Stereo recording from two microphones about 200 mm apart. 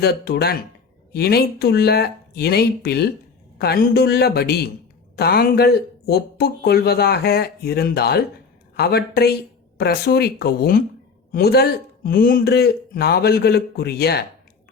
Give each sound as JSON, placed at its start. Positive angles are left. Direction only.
{"t": 0.0, "sound": "speech", "side_deg": 55}